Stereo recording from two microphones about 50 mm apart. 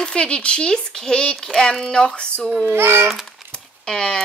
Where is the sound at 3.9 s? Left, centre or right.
Centre.